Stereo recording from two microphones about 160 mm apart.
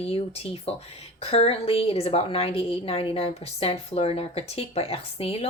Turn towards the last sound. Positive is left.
turn(degrees=40)  # may be behind; listen again after turning